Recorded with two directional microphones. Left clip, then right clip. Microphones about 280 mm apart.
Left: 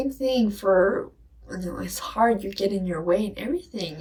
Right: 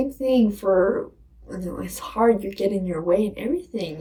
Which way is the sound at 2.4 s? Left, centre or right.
Centre.